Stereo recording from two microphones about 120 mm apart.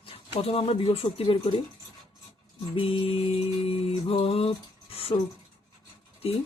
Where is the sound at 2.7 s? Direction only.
50° left (ahead or behind).